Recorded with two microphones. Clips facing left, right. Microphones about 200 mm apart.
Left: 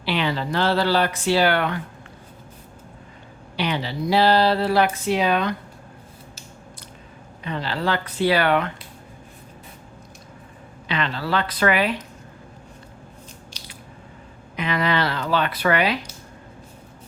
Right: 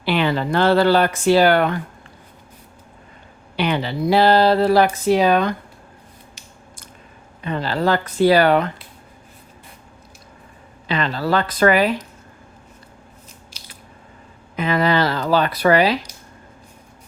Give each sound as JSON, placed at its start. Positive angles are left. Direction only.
{"t": 0.0, "sound": "speech", "side_deg": -50}
{"t": 3.6, "sound": "speech", "side_deg": -55}
{"t": 7.4, "sound": "speech", "side_deg": -45}
{"t": 10.8, "sound": "speech", "side_deg": -40}
{"t": 14.5, "sound": "speech", "side_deg": -45}